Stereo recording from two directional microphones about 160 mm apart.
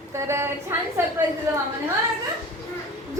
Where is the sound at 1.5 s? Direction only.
20° right (ahead or behind).